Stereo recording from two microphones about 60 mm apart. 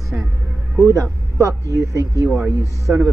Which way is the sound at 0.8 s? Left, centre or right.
Right.